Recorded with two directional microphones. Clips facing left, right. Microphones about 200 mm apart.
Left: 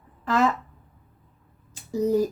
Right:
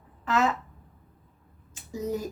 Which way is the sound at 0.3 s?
40° left (ahead or behind).